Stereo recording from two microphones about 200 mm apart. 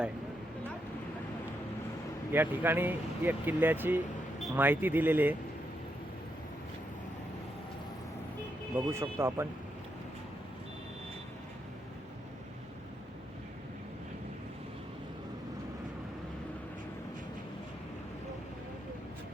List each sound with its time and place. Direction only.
2.3 s speech: 10° right (ahead or behind)
8.9 s speech: 15° right (ahead or behind)